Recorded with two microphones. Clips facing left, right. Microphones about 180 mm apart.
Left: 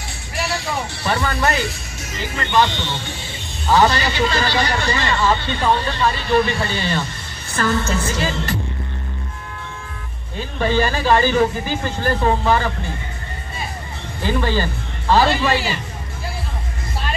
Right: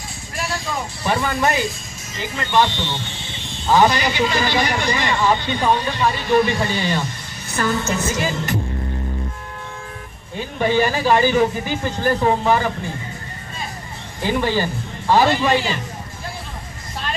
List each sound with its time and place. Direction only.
0.4 s music: 70° left (ahead or behind)
1.0 s a man's voice: 15° right (ahead or behind)
10.3 s a man's voice: 15° right (ahead or behind)
14.2 s a man's voice: 15° right (ahead or behind)